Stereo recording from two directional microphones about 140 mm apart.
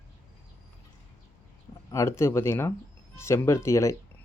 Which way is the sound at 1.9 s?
20° left (ahead or behind).